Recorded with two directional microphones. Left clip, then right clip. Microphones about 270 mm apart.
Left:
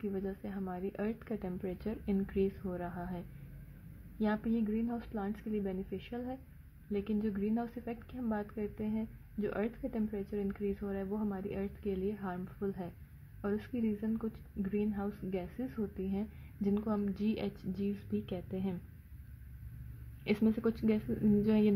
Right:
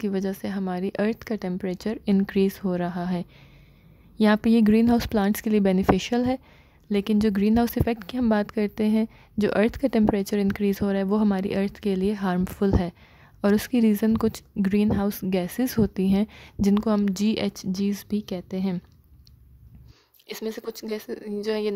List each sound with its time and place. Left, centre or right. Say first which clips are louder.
0.0 s a woman's voice: right 11 dB; right
20.3 s speech: right 5 dB; right